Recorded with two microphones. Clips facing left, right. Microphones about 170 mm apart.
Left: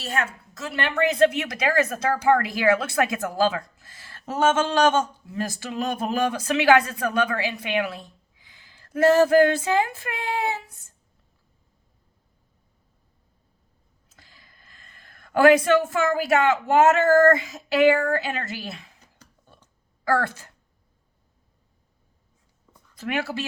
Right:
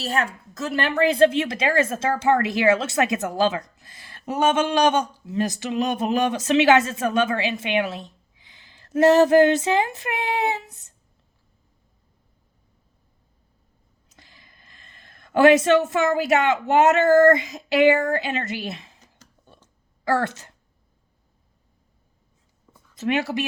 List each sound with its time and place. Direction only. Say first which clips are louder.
0.0 s a woman's voice: right 3 dB; 35° right (ahead or behind); by 10.9 s 20° right (ahead or behind)
14.1 s speech: right 2 dB; 20° right (ahead or behind)
20.1 s speech: right 1 dB; 20° right (ahead or behind)
23.0 s a woman's voice: right 4 dB; 20° right (ahead or behind)